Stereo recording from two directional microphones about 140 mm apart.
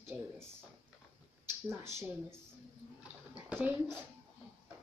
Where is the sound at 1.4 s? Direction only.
20° right (ahead or behind).